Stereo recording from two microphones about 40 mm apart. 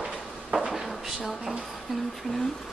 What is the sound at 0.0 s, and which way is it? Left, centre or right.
Drawer open or close, centre.